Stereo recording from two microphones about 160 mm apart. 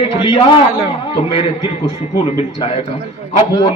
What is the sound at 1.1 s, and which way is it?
Speech, 35° left (ahead or behind).